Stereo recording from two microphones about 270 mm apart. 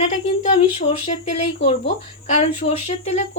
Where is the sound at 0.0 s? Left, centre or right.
Left.